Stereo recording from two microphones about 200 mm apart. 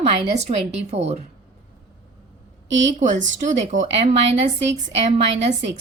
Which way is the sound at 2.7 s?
65° right (ahead or behind).